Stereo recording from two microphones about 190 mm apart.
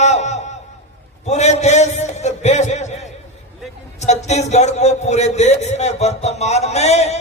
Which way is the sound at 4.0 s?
35° left (ahead or behind).